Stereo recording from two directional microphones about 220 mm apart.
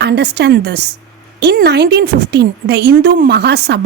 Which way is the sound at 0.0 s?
50° right (ahead or behind).